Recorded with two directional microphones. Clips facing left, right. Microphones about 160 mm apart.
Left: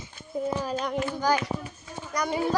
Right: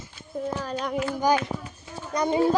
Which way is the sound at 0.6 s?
5° left (ahead or behind).